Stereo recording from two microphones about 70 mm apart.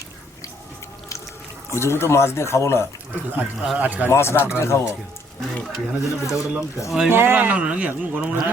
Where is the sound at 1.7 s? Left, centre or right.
Left.